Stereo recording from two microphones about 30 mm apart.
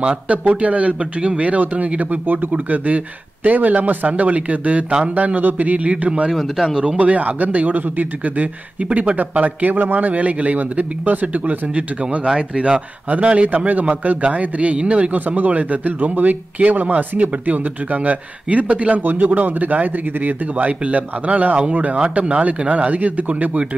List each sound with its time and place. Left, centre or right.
0.0 s speech: right
2.0 s a man's voice: right
6.3 s speech: centre
6.7 s speech: right
7.0 s a man's voice: right
12.3 s speech: right
13.7 s a man's voice: right
14.8 s speech: right
15.1 s a man's voice: right
19.0 s a man's voice: right
20.8 s a man's voice: right
22.0 s a man's voice: right